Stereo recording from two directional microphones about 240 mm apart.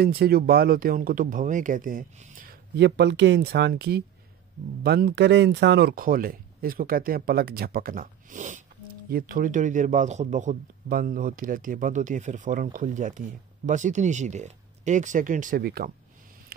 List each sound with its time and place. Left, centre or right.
0.0 s speech: right